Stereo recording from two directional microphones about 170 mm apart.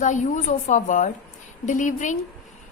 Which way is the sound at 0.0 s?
45° left (ahead or behind).